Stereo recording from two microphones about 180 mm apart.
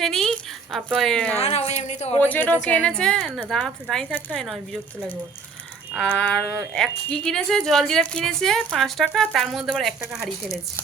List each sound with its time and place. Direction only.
0.0 s a woman's voice: centre (ahead or behind)
1.4 s speech: 35° left (ahead or behind)
2.2 s speech: 10° left (ahead or behind)
6.0 s speech: 5° left (ahead or behind)